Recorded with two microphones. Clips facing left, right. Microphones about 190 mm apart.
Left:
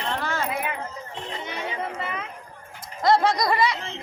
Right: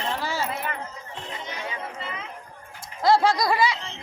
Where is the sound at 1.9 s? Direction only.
55° left (ahead or behind).